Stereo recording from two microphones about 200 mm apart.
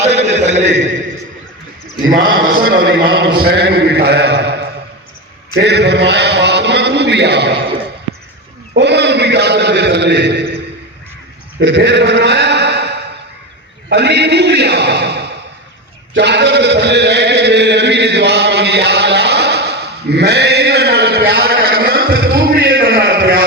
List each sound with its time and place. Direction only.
0.3 s a man's voice: 35° right (ahead or behind)
2.5 s a man's voice: 50° right (ahead or behind)
5.5 s a man's voice: 60° right (ahead or behind)
8.7 s a man's voice: 60° right (ahead or behind)
11.6 s a man's voice: 60° right (ahead or behind)
13.9 s a man's voice: 55° right (ahead or behind)
16.1 s a sound: 60° right (ahead or behind)